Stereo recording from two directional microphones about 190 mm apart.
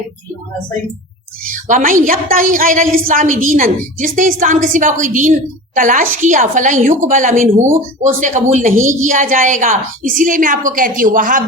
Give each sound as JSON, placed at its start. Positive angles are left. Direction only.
{"t": 1.5, "sound": "a woman's voice", "side_deg": -45}